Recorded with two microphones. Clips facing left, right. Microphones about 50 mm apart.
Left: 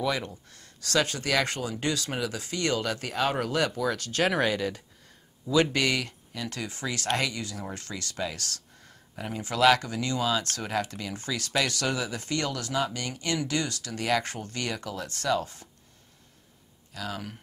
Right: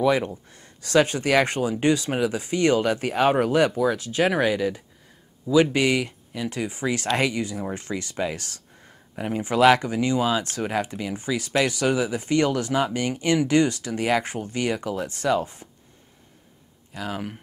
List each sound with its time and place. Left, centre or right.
0.0 s speech: right
16.9 s speech: right